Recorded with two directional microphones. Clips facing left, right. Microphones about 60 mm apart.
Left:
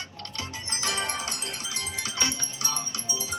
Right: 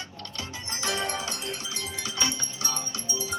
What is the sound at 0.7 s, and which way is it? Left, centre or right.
Music, right.